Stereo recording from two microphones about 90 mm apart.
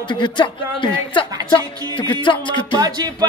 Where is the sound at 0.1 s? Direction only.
60° left (ahead or behind).